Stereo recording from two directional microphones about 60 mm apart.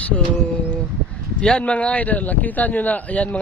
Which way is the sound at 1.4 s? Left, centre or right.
Centre.